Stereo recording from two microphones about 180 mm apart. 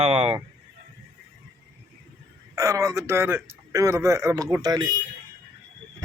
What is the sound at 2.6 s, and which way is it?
Speech, 20° right (ahead or behind).